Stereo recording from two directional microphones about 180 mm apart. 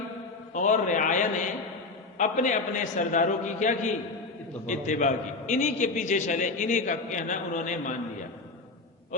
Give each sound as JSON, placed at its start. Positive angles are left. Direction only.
{"t": 0.5, "sound": "a man's voice", "side_deg": 45}